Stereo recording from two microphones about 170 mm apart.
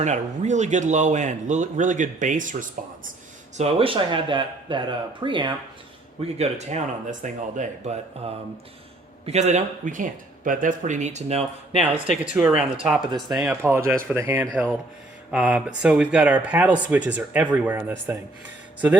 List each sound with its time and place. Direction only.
0.0 s speech: 45° right (ahead or behind)
3.6 s speech: 35° right (ahead or behind)
12.2 s speech: 5° right (ahead or behind)